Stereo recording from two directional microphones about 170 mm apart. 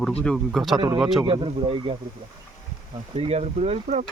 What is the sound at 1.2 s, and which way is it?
Speech, 30° right (ahead or behind).